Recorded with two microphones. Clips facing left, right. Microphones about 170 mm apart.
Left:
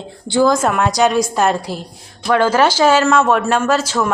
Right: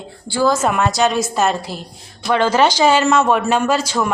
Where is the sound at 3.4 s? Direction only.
10° right (ahead or behind).